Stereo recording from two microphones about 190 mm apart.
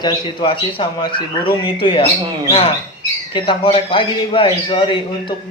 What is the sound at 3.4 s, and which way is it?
Speech, 25° left (ahead or behind).